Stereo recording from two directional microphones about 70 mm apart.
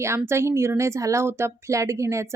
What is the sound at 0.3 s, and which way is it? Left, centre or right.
A woman's voice, right.